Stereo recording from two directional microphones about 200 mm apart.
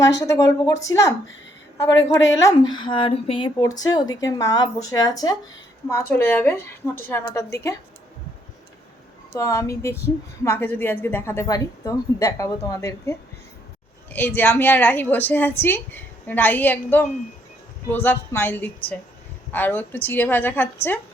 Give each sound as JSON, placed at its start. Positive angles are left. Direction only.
{"t": 0.2, "sound": "a woman's voice", "side_deg": 15}
{"t": 9.3, "sound": "a woman's voice", "side_deg": 15}